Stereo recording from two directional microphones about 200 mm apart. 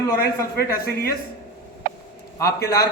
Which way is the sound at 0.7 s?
50° left (ahead or behind).